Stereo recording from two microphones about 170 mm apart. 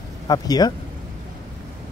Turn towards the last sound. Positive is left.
turn(degrees=25)  # may be behind; listen again after turning